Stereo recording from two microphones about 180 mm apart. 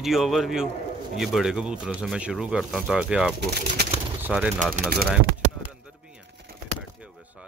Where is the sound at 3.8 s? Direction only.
65° right (ahead or behind).